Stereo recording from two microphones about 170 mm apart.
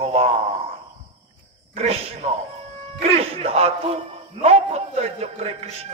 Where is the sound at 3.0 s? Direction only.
35° right (ahead or behind).